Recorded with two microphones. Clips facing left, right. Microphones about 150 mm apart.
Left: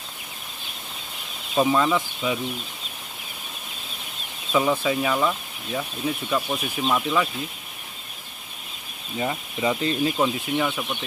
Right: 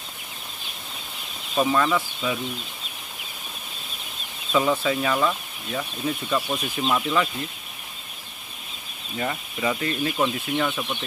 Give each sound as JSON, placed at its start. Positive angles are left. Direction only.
{"t": 1.6, "sound": "speech", "side_deg": 15}
{"t": 4.5, "sound": "speech", "side_deg": 10}
{"t": 9.1, "sound": "speech", "side_deg": 10}
{"t": 10.1, "sound": "speech", "side_deg": 10}